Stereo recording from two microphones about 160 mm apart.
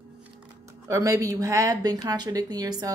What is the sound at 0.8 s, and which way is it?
Speech, 20° right (ahead or behind).